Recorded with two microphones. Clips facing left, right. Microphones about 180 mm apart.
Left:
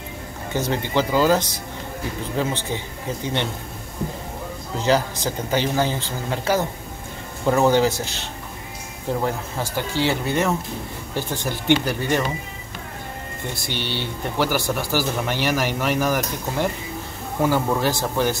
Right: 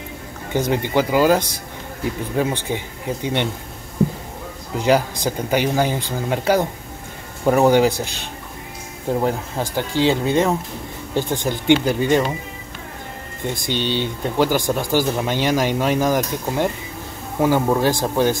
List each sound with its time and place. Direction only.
0.5 s speech: 15° right (ahead or behind)
4.7 s speech: 15° right (ahead or behind)
13.7 s speech: 15° right (ahead or behind)